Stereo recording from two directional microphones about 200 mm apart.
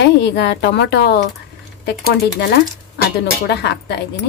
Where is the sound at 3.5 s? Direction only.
55° left (ahead or behind).